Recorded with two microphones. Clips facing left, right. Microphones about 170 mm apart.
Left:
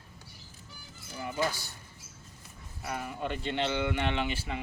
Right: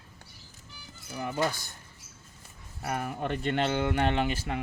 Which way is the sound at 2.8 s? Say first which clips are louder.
Right 3 dB; 55° right (ahead or behind).